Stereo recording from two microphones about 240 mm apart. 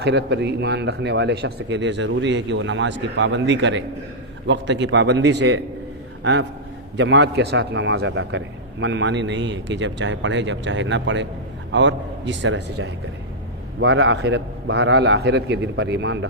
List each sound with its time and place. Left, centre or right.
0.0 s a man's voice: right
6.9 s a man's voice: right